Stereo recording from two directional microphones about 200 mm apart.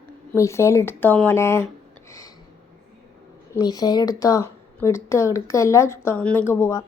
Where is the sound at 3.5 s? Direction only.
20° left (ahead or behind).